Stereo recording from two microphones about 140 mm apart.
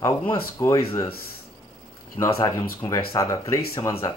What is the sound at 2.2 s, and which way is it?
Speech, 35° left (ahead or behind).